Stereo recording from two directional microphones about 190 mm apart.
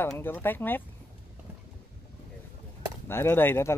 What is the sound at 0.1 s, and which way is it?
Speech, 10° left (ahead or behind).